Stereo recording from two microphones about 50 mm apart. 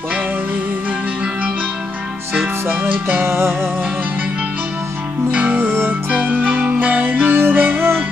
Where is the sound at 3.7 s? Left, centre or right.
Right.